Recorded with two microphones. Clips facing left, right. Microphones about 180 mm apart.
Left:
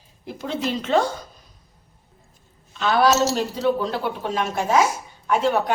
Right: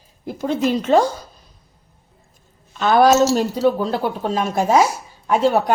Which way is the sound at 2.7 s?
45° right (ahead or behind).